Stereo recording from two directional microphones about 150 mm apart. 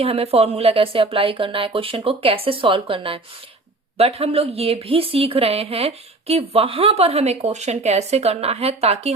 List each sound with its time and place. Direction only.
0.0 s speech: 40° right (ahead or behind)